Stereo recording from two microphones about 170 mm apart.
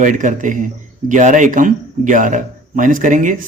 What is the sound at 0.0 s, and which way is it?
A man's voice, 50° right (ahead or behind).